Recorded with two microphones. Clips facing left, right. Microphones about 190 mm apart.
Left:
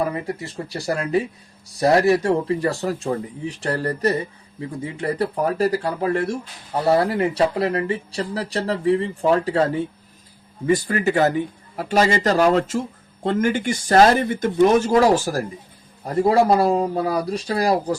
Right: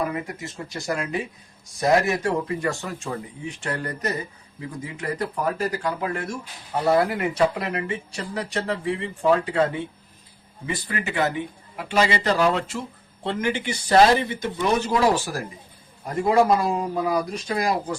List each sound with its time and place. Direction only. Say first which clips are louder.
0.0 s speech: left 3 dB; 30° left (ahead or behind)